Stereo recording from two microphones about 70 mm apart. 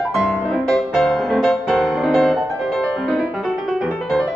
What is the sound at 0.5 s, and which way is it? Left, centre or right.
Music, centre.